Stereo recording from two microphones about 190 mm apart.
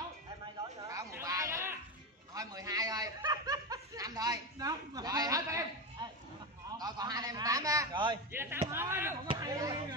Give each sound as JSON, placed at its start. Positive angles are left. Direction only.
{"t": 0.8, "sound": "a sound", "side_deg": -15}
{"t": 2.3, "sound": "a man's voice", "side_deg": -20}
{"t": 8.3, "sound": "a man's voice", "side_deg": -10}